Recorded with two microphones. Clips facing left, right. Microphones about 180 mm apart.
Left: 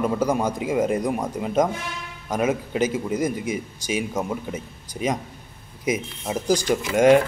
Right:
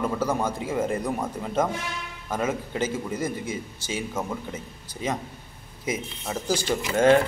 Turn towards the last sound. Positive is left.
turn(degrees=15)  # may be behind; listen again after turning